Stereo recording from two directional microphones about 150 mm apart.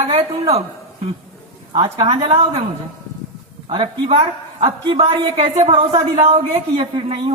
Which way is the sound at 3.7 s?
35° right (ahead or behind).